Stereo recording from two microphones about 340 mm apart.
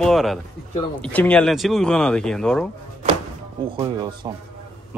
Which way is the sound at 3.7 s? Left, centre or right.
Centre.